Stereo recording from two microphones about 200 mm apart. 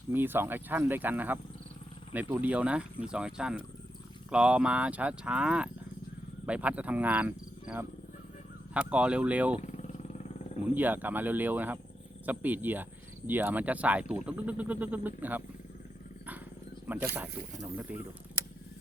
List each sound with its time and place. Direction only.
0.1 s speech: 10° right (ahead or behind)
9.6 s vehicle: 35° left (ahead or behind)
10.8 s speech: 10° right (ahead or behind)
16.8 s speech: 10° right (ahead or behind)